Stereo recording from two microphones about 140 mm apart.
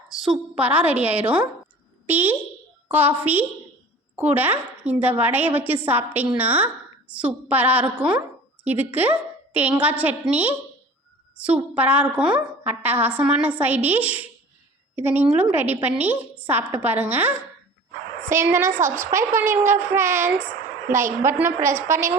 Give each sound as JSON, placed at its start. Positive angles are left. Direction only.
{"t": 0.1, "sound": "a woman's voice", "side_deg": -5}